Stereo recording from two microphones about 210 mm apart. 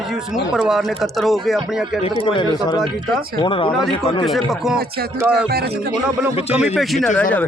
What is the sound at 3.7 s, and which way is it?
Speech, centre (ahead or behind).